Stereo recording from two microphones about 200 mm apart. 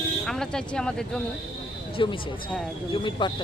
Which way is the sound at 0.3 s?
5° left (ahead or behind).